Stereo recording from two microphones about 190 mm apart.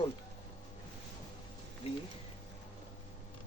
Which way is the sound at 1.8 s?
30° left (ahead or behind).